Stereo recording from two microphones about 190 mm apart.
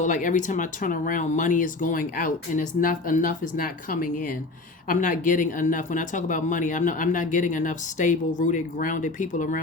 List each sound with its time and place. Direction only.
0.0 s speech: 45° left (ahead or behind)